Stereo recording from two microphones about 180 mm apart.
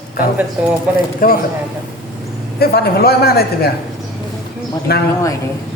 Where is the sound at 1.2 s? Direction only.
50° left (ahead or behind).